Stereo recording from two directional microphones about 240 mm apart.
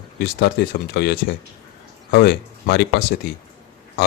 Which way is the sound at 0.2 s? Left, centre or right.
Left.